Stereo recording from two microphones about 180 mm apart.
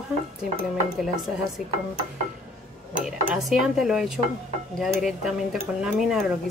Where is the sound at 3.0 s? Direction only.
Centre (ahead or behind).